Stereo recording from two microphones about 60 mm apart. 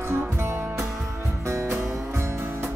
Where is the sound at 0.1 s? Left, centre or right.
Right.